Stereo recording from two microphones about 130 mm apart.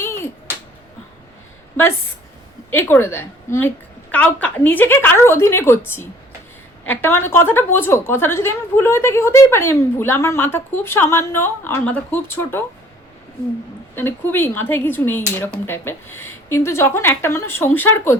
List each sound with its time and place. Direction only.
2.6 s a woman's voice: 15° left (ahead or behind)
13.9 s a woman's voice: 15° left (ahead or behind)